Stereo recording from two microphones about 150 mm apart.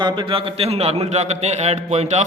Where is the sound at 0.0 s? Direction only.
35° right (ahead or behind).